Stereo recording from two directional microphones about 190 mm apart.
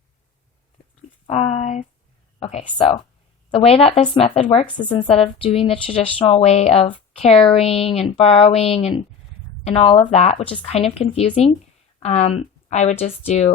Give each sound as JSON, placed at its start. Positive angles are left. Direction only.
{"t": 1.3, "sound": "speech", "side_deg": 35}